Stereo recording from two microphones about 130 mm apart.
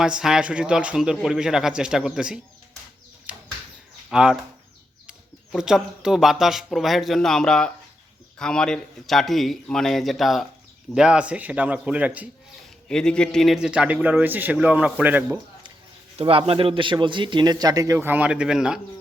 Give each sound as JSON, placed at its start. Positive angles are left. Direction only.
{"t": 0.0, "sound": "speech", "side_deg": -5}
{"t": 3.3, "sound": "bird flight", "side_deg": -10}
{"t": 4.1, "sound": "a man's voice", "side_deg": -5}
{"t": 12.9, "sound": "a man's voice", "side_deg": 5}
{"t": 16.1, "sound": "a man's voice", "side_deg": -45}